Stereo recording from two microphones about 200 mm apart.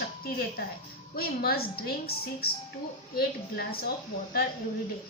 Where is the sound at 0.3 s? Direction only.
50° left (ahead or behind).